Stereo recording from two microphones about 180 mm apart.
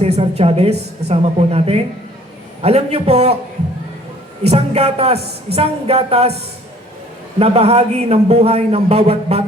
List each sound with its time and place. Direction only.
0.2 s a man's voice: 35° right (ahead or behind)
4.4 s a man's voice: 35° right (ahead or behind)
7.3 s a man's voice: 35° right (ahead or behind)